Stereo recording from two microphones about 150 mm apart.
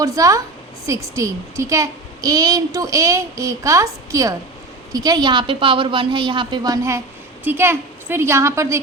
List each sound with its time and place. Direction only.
0.0 s a woman's voice: 20° right (ahead or behind)
7.4 s a woman's voice: 15° right (ahead or behind)